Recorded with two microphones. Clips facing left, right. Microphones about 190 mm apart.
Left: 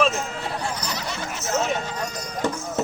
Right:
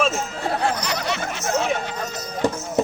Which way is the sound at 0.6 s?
65° right (ahead or behind).